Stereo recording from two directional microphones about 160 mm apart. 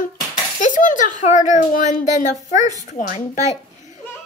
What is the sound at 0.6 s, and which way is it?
A child's voice, 55° left (ahead or behind).